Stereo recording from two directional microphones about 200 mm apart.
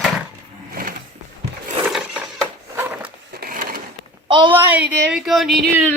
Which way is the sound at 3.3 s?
45° right (ahead or behind).